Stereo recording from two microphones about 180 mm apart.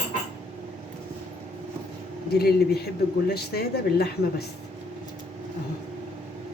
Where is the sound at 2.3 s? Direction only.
60° left (ahead or behind).